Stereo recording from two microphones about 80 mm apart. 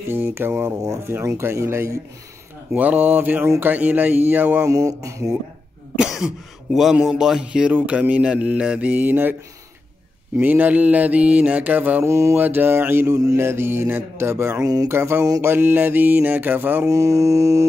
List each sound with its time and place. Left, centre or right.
0.1 s mantra: right
0.7 s mantra: right
1.0 s mantra: right
2.7 s mantra: centre
4.6 s mantra: right
5.9 s speech: centre; by 9.4 s right
10.4 s mantra: right
12.0 s mantra: right
12.4 s mantra: right
13.1 s mantra: right
13.4 s mantra: right
16.9 s mantra: right